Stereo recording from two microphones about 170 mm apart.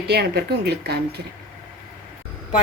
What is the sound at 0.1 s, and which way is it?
Speech, 70° right (ahead or behind).